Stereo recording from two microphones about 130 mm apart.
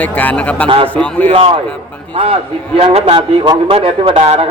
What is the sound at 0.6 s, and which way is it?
Speech, 45° right (ahead or behind).